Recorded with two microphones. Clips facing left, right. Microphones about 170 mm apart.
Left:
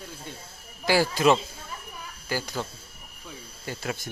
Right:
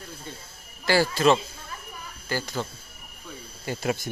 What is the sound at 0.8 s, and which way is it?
Speech, 10° left (ahead or behind).